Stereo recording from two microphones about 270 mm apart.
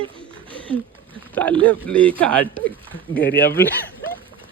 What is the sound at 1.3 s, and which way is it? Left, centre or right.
Speech, centre.